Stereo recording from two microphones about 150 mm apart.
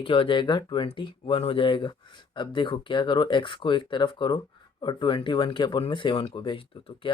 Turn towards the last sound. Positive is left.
turn(degrees=35)  # may be behind; listen again after turning